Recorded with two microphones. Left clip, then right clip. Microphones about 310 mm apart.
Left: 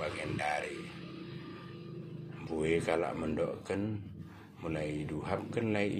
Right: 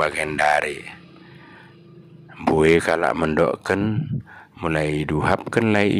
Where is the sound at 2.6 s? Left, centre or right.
Right.